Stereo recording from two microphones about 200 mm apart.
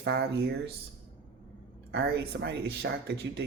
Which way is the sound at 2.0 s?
60° right (ahead or behind).